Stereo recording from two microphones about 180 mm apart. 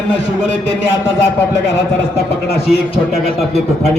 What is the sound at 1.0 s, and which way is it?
Speech, 10° left (ahead or behind).